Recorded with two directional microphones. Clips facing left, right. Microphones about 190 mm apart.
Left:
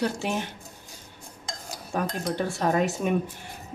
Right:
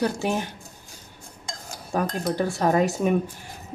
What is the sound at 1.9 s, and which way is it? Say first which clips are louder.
Speech: right 3 dB; 40° right (ahead or behind).